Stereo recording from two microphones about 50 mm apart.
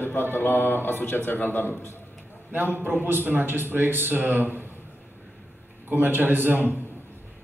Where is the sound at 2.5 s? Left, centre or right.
Right.